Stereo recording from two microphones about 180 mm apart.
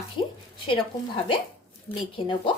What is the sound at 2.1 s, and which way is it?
Speech, 25° left (ahead or behind).